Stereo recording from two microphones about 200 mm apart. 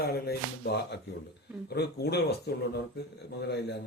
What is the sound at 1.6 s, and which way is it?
A man's voice, 55° left (ahead or behind).